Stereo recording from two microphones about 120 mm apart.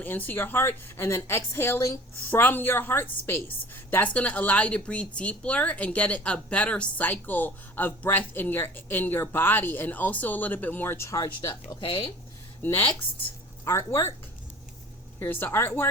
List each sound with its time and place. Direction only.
0.0 s a woman's voice: 15° left (ahead or behind)
11.8 s speech: 45° left (ahead or behind)
13.7 s speech: 25° left (ahead or behind)
15.2 s speech: 20° left (ahead or behind)